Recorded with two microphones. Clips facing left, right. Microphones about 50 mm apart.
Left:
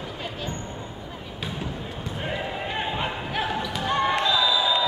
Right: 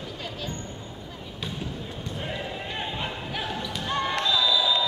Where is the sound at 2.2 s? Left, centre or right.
Centre.